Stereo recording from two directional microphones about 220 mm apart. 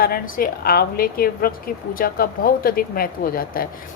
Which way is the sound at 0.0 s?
40° left (ahead or behind).